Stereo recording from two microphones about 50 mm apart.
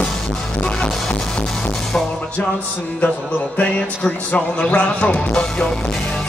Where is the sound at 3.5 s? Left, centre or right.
Left.